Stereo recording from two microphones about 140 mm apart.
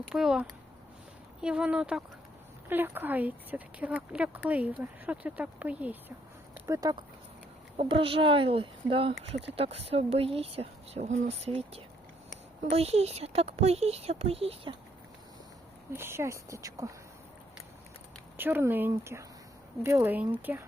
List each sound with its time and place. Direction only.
0.1 s speech: 5° right (ahead or behind)
6.7 s speech: 25° right (ahead or behind)
7.8 s speech: 40° right (ahead or behind)
15.9 s speech: 15° right (ahead or behind)
18.3 s speech: 15° right (ahead or behind)